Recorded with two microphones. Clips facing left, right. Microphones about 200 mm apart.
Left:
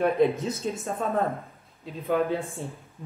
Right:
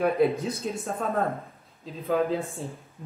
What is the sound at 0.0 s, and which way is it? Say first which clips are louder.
Speech: left 1 dB; centre (ahead or behind).